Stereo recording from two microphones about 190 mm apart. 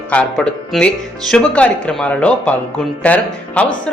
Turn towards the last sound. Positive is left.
turn(degrees=5)  # may be behind; listen again after turning